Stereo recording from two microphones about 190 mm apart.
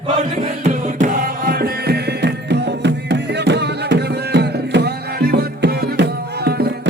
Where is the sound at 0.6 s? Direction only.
45° right (ahead or behind).